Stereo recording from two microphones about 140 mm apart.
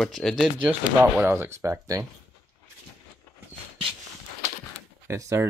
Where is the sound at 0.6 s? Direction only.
15° right (ahead or behind).